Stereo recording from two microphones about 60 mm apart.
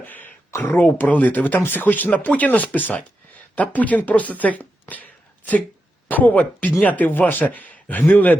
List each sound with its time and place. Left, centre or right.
0.0 s speech: left
6.1 s speech: left